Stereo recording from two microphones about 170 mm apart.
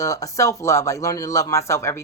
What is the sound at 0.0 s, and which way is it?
Speech, 20° left (ahead or behind).